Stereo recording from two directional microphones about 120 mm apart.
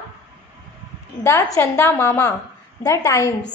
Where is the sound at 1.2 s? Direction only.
25° left (ahead or behind).